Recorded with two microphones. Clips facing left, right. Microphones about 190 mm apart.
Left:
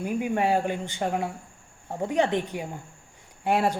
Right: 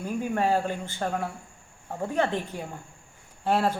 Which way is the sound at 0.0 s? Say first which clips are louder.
Left 1 dB; 15° left (ahead or behind).